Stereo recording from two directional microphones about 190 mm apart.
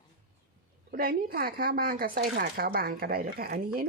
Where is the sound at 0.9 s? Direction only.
50° right (ahead or behind).